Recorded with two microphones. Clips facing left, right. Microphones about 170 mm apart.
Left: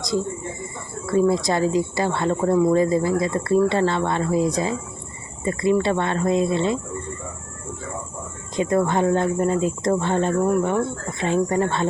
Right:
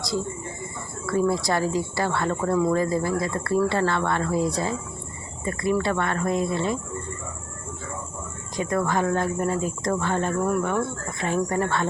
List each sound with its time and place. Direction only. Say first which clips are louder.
1.1 s speech: left 4 dB; 20° left (ahead or behind)
8.5 s speech: left 4 dB; 25° left (ahead or behind)